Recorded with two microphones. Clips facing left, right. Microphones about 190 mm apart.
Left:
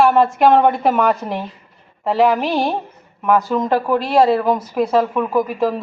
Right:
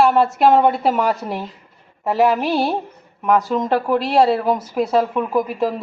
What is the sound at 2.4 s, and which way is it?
Speech, 15° left (ahead or behind).